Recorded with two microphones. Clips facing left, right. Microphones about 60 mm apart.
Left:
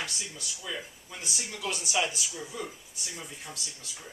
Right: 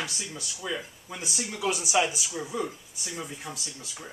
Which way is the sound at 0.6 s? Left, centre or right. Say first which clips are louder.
Right 5 dB; centre.